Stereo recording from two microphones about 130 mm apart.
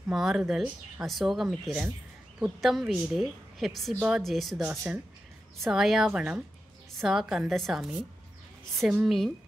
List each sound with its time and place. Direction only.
0.1 s speech: centre (ahead or behind)
4.6 s speech: 15° right (ahead or behind)
5.6 s speech: centre (ahead or behind)